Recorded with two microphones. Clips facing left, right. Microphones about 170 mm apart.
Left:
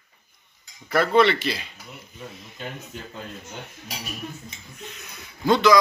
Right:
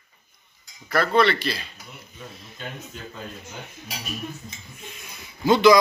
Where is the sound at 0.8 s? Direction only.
15° left (ahead or behind).